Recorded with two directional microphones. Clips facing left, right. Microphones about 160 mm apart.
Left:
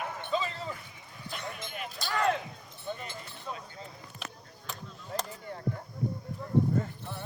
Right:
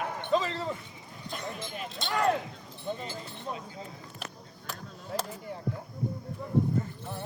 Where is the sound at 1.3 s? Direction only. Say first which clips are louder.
Right 2 dB; 35° right (ahead or behind).